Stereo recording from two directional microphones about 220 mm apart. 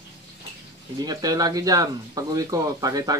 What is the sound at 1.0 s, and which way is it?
Speech, 15° right (ahead or behind).